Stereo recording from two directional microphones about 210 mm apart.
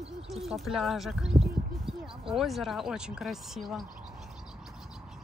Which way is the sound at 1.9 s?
25° right (ahead or behind).